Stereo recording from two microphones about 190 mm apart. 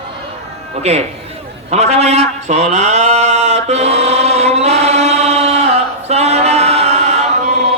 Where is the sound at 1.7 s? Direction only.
35° right (ahead or behind).